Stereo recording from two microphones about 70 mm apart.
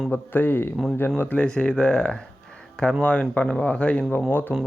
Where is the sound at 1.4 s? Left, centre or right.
Centre.